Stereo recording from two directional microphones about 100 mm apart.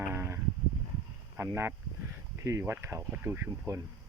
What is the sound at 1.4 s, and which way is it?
Speech, 25° right (ahead or behind).